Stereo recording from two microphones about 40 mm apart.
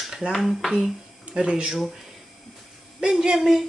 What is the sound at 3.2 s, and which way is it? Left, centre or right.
Speech, centre.